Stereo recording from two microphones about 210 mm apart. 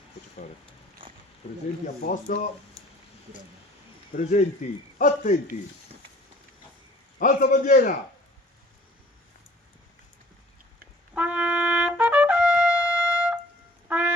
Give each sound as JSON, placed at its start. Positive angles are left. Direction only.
{"t": 2.0, "sound": "a man's voice", "side_deg": 40}
{"t": 4.1, "sound": "a man's voice", "side_deg": 35}
{"t": 7.2, "sound": "a man's voice", "side_deg": 40}
{"t": 11.1, "sound": "trumpet", "side_deg": -5}
{"t": 13.8, "sound": "music", "side_deg": -5}